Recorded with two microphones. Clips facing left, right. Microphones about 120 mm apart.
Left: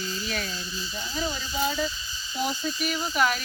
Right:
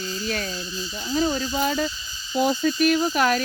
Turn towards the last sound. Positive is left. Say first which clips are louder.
# right 5 dB
turn(degrees=-50)  # may be behind; listen again after turning